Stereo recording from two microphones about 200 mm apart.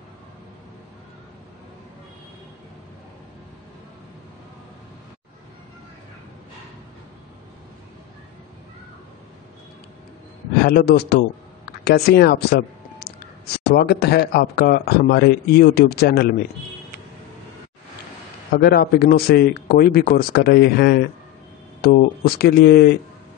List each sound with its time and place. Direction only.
10.6 s a man's voice: 50° left (ahead or behind)
18.5 s a man's voice: 50° left (ahead or behind)